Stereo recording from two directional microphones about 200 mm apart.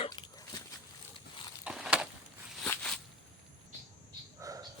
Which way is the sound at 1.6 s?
5° right (ahead or behind).